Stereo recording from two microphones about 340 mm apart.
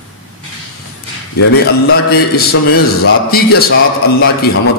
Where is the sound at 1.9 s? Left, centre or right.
Left.